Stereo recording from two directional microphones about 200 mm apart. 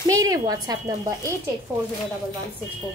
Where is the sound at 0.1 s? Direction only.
15° right (ahead or behind).